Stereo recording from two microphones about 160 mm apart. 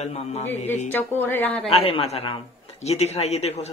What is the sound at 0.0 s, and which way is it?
Speech, 45° left (ahead or behind).